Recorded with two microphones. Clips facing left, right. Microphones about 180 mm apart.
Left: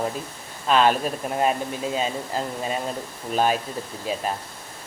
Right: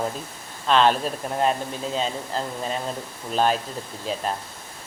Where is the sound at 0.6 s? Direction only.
10° left (ahead or behind).